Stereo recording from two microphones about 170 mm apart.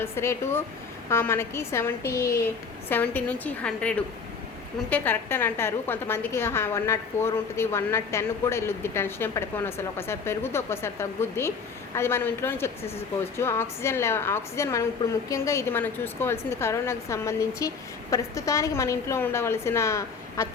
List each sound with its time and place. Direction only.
0.0 s a woman's voice: 15° left (ahead or behind)